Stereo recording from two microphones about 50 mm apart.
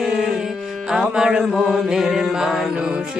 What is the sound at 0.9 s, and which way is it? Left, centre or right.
Chant, centre.